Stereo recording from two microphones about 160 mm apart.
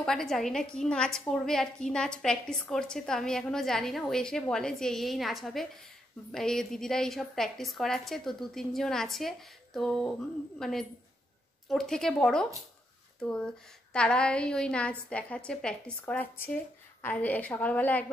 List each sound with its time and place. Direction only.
0.0 s a woman's voice: 5° left (ahead or behind)
13.9 s a woman's voice: 5° left (ahead or behind)